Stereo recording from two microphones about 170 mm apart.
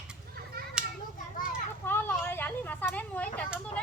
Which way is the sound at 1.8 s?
10° left (ahead or behind).